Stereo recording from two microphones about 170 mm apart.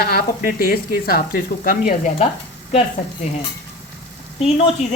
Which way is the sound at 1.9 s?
45° left (ahead or behind).